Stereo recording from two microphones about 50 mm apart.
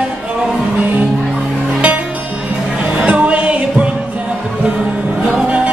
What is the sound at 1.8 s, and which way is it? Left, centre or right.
Music, right.